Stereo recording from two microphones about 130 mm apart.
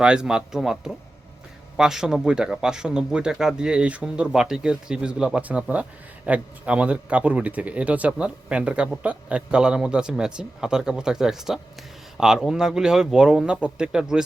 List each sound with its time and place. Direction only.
0.0 s speech: 5° right (ahead or behind)